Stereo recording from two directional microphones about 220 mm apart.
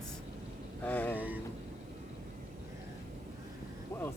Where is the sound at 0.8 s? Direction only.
10° left (ahead or behind).